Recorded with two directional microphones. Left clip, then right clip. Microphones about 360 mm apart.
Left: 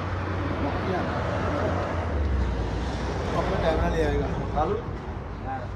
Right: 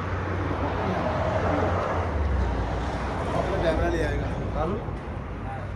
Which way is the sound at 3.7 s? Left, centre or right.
Left.